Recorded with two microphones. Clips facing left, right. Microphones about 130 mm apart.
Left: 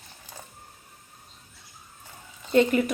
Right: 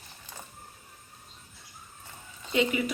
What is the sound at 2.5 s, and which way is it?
Speech, 50° left (ahead or behind).